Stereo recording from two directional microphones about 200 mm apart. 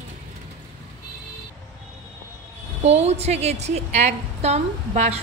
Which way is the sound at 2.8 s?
35° right (ahead or behind).